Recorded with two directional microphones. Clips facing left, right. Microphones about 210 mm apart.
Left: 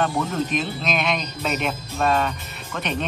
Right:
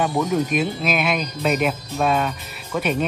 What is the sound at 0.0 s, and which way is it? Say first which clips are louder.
Speech: right 3 dB; 10° right (ahead or behind).